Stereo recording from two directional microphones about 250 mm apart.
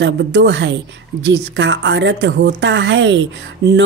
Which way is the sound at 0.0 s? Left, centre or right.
Right.